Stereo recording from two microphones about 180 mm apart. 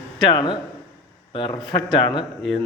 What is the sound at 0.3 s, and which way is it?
Speech, 25° left (ahead or behind).